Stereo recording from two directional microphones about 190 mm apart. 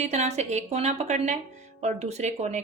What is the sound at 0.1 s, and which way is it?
Speech, 35° right (ahead or behind).